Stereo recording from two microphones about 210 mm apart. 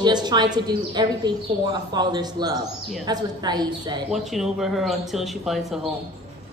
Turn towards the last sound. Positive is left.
turn(degrees=0)  # may be behind; listen again after turning